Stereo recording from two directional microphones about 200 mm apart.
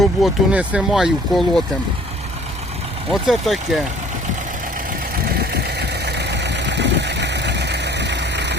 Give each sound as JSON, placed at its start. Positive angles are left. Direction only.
{"t": 0.0, "sound": "speech", "side_deg": -5}
{"t": 3.1, "sound": "speech", "side_deg": 0}
{"t": 5.4, "sound": "vehicle", "side_deg": -55}